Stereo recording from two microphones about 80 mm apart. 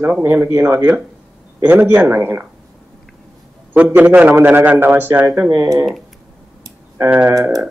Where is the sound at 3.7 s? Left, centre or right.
Centre.